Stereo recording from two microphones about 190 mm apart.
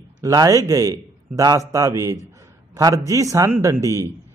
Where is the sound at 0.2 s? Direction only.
20° right (ahead or behind).